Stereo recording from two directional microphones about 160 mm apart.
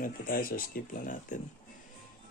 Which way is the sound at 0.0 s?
60° left (ahead or behind).